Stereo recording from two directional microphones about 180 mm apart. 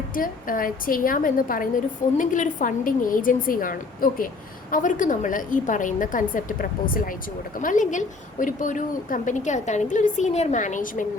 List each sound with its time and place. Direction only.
0.1 s a woman's voice: 50° left (ahead or behind)